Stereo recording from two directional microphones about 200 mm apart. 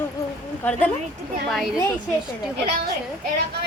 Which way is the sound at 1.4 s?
Centre (ahead or behind).